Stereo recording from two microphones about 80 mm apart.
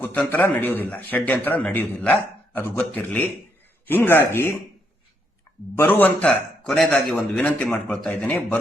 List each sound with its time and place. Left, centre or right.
0.3 s a man's voice: left
5.7 s a man's voice: left
6.2 s a man's voice: centre